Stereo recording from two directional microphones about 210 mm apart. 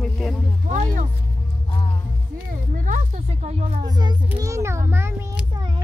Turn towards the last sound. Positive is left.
turn(degrees=-15)  # may be behind; listen again after turning